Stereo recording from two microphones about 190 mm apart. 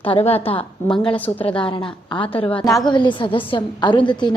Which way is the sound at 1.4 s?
30° left (ahead or behind).